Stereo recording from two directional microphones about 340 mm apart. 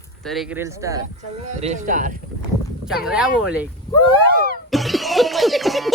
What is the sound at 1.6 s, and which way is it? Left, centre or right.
Speech, right.